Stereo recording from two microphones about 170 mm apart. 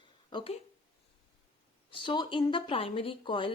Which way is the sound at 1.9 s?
30° left (ahead or behind).